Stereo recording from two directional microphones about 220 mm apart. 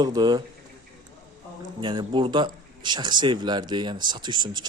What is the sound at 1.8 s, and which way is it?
A man's voice, 20° right (ahead or behind).